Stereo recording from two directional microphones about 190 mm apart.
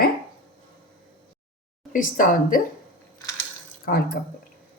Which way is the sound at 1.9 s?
45° left (ahead or behind).